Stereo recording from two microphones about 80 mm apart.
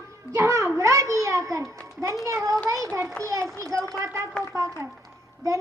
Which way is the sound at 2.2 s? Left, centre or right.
Right.